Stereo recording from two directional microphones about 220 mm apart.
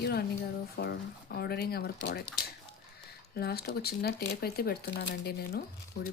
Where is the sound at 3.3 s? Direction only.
45° left (ahead or behind).